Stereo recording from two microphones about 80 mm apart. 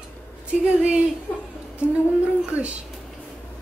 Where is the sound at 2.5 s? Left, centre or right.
Centre.